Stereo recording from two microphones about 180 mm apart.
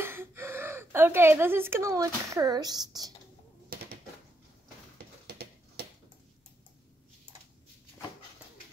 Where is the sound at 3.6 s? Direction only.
55° right (ahead or behind).